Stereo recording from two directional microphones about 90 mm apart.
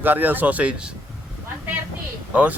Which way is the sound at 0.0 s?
20° right (ahead or behind).